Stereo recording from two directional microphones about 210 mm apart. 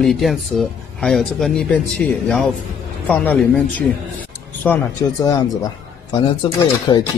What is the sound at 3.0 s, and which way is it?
Speech, 5° left (ahead or behind).